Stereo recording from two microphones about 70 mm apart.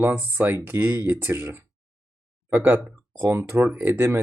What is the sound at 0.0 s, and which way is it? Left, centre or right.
Speech, right.